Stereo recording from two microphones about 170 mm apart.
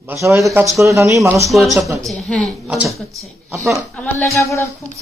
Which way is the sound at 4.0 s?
15° left (ahead or behind).